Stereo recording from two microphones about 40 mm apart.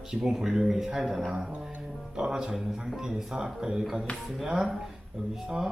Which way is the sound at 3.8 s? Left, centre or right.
Centre.